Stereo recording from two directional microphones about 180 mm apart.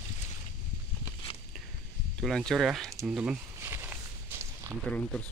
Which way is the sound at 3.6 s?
15° right (ahead or behind).